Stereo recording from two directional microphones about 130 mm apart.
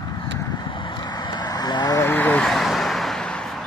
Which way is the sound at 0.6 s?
40° left (ahead or behind).